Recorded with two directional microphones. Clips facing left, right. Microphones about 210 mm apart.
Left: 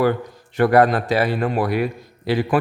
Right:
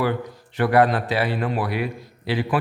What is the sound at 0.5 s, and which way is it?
Speech, 45° left (ahead or behind).